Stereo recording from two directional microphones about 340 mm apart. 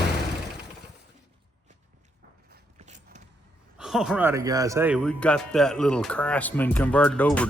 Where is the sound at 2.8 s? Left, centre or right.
Right.